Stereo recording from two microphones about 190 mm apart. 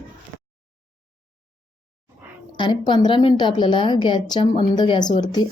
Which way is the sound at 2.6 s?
25° left (ahead or behind).